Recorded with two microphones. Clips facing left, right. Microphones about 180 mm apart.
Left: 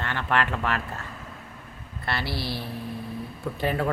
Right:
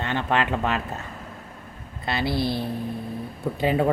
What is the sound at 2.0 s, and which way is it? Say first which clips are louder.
Speech: right 6 dB; 20° right (ahead or behind).